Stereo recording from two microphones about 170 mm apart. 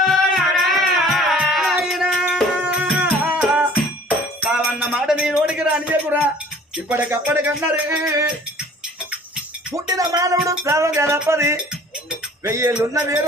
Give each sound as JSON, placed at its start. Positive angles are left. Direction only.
{"t": 0.0, "sound": "music", "side_deg": 0}
{"t": 4.5, "sound": "a sound", "side_deg": -5}
{"t": 6.8, "sound": "music", "side_deg": -10}
{"t": 9.7, "sound": "music", "side_deg": -20}